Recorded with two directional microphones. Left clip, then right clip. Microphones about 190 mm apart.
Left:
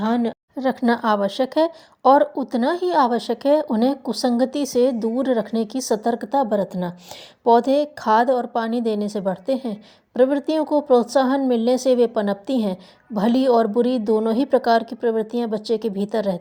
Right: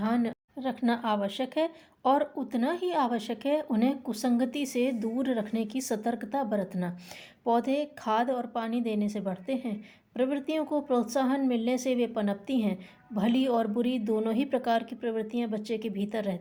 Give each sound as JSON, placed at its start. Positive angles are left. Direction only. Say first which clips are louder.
{"t": 0.0, "sound": "a woman's voice", "louder": "left 8 dB", "side_deg": 35}
{"t": 4.6, "sound": "speech", "louder": "left 11 dB", "side_deg": 5}
{"t": 5.0, "sound": "speech", "louder": "left 9 dB", "side_deg": 30}
{"t": 5.3, "sound": "speech", "louder": "left 11 dB", "side_deg": 5}
{"t": 5.9, "sound": "a woman's voice", "louder": "left 12 dB", "side_deg": 30}